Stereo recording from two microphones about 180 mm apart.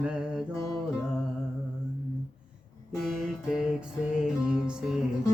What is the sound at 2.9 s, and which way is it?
Music, centre (ahead or behind).